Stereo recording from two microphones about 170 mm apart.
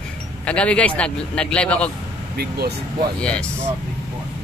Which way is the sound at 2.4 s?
65° right (ahead or behind).